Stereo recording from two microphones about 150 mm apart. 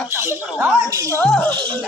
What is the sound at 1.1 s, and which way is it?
Speech, 10° left (ahead or behind).